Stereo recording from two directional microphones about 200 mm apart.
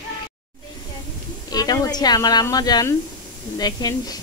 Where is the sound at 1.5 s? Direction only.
20° left (ahead or behind).